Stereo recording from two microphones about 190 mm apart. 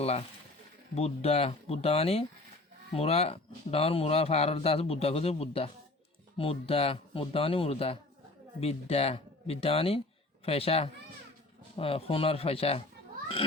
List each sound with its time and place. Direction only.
0.0 s speech: 35° left (ahead or behind)